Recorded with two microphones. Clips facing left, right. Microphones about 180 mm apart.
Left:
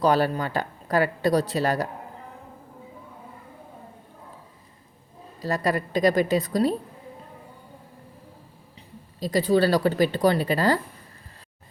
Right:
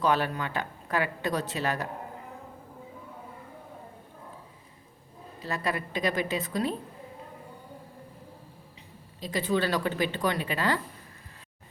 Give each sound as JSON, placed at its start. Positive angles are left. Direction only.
{"t": 0.0, "sound": "a woman's voice", "side_deg": 35}
{"t": 5.4, "sound": "a woman's voice", "side_deg": 40}
{"t": 9.2, "sound": "a woman's voice", "side_deg": 40}